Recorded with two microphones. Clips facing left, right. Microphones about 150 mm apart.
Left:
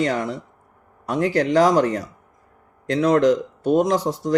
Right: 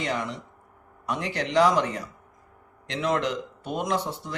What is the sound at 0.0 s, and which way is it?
Speech, 40° left (ahead or behind).